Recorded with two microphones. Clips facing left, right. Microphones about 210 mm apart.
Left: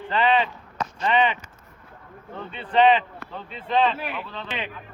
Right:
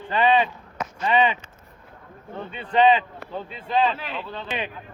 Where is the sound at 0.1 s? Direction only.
15° right (ahead or behind).